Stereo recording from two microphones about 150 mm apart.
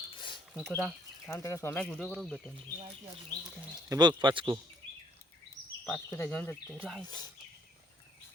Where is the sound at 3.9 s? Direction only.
30° right (ahead or behind).